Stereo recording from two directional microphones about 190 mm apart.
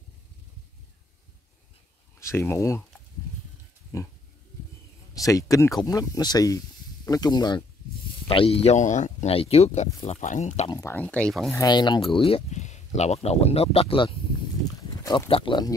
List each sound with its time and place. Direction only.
2.1 s speech: 15° left (ahead or behind)
3.9 s speech: 15° left (ahead or behind)
5.1 s speech: 15° left (ahead or behind); by 10.7 s 35° left (ahead or behind)
10.7 s speech: 15° left (ahead or behind)
11.5 s speech: 20° left (ahead or behind)
14.6 s livestock: 20° left (ahead or behind)